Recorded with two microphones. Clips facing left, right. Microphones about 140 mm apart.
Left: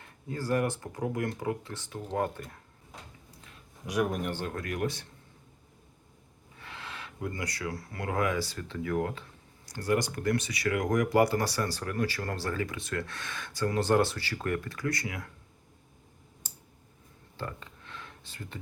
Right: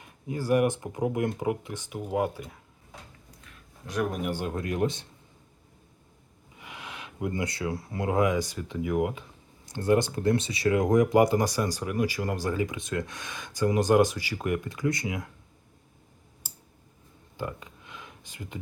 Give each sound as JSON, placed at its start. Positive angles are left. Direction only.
{"t": 0.0, "sound": "speech", "side_deg": -15}
{"t": 4.1, "sound": "speech", "side_deg": -10}
{"t": 6.6, "sound": "speech", "side_deg": -15}
{"t": 16.4, "sound": "clicking", "side_deg": -5}
{"t": 17.3, "sound": "a sound", "side_deg": -15}